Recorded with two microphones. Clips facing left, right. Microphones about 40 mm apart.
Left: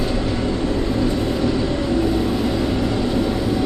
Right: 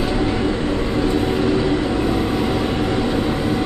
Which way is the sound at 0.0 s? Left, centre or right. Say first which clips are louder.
Right 2 dB; right.